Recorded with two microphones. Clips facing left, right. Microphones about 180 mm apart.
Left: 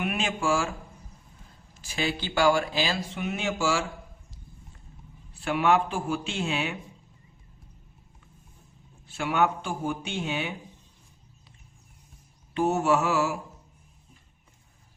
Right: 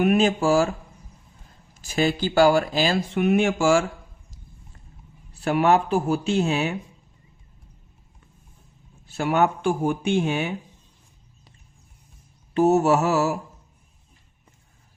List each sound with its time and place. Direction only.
0.0 s speech: 40° right (ahead or behind)
1.8 s speech: 45° right (ahead or behind)
5.3 s speech: 40° right (ahead or behind)
9.0 s speech: 40° right (ahead or behind)
12.5 s speech: 40° right (ahead or behind)